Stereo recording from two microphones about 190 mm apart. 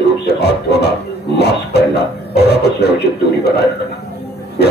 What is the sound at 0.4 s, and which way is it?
Music, 60° left (ahead or behind).